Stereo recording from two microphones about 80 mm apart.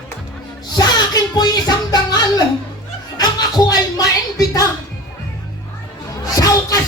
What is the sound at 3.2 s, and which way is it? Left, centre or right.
Music, left.